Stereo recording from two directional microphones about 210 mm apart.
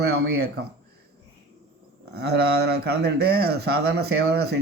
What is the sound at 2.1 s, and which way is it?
Speech, 50° right (ahead or behind).